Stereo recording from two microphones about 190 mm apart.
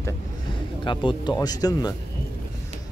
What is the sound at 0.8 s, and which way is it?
Speech, 25° left (ahead or behind).